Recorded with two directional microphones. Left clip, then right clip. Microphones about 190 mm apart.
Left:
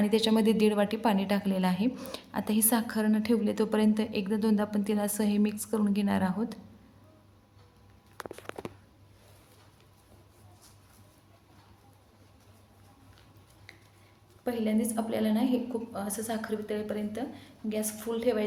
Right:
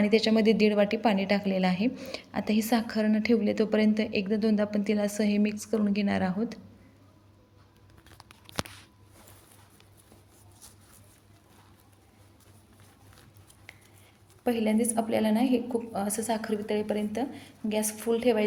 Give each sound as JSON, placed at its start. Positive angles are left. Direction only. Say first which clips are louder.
{"t": 0.0, "sound": "a woman's voice", "louder": "right 3 dB", "side_deg": 0}
{"t": 14.4, "sound": "a woman's voice", "louder": "right 4 dB", "side_deg": -30}